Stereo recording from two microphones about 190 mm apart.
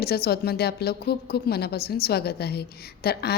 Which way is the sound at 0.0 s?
55° left (ahead or behind).